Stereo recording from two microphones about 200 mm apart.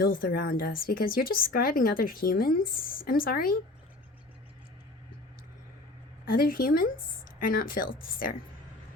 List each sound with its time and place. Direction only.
0.0 s speech: 45° left (ahead or behind)
6.2 s speech: 45° left (ahead or behind)